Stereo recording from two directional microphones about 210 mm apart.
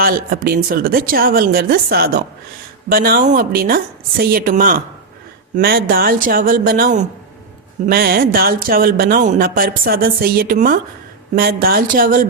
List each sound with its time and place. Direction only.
0.0 s speech: 45° right (ahead or behind)